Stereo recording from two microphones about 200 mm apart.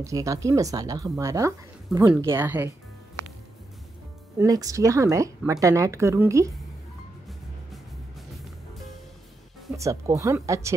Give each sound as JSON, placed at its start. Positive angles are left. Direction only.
{"t": 0.0, "sound": "speech", "side_deg": -15}
{"t": 4.4, "sound": "speech", "side_deg": -15}
{"t": 9.8, "sound": "speech", "side_deg": -15}